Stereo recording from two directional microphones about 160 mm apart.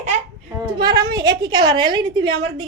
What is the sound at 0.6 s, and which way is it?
A woman's voice, 25° right (ahead or behind).